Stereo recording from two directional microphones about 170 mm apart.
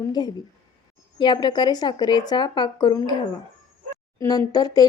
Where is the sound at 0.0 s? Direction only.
25° left (ahead or behind).